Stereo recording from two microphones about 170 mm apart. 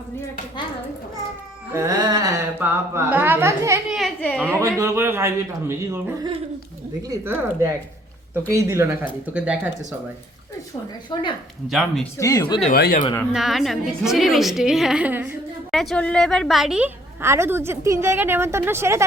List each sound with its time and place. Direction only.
1.7 s a sound: 20° right (ahead or behind)
2.6 s a woman's voice: 15° right (ahead or behind)
3.8 s a sound: centre (ahead or behind)
4.2 s a woman's voice: 5° left (ahead or behind)
4.4 s a woman's voice: 15° right (ahead or behind)
9.2 s a woman's voice: 5° right (ahead or behind)
11.1 s speech: 30° left (ahead or behind)
11.7 s a woman's voice: centre (ahead or behind)
12.1 s speech: 20° left (ahead or behind)
12.7 s speech: 65° left (ahead or behind)
13.3 s a woman's voice: centre (ahead or behind)
15.7 s a woman's voice: centre (ahead or behind); by 19.0 s 15° right (ahead or behind)